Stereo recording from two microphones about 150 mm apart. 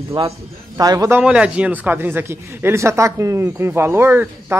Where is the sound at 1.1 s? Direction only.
5° right (ahead or behind).